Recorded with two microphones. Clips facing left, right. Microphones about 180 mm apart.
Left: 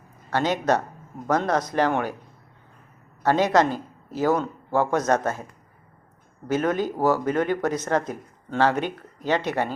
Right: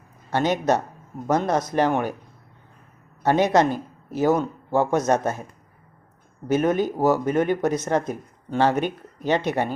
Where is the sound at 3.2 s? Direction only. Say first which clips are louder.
Right 1 dB; 20° right (ahead or behind).